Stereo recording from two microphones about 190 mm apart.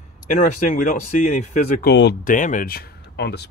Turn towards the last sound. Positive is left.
turn(degrees=60)  # may be behind; listen again after turning